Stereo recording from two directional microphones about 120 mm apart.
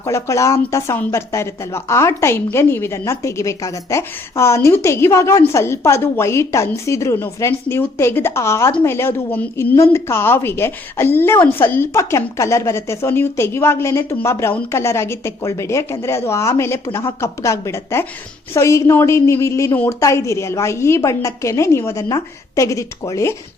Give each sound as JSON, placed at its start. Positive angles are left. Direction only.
{"t": 0.0, "sound": "a woman's voice", "side_deg": 25}